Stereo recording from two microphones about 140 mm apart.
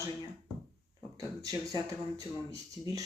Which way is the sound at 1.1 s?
25° right (ahead or behind).